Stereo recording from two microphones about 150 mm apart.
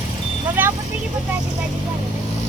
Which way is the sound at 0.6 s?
10° right (ahead or behind).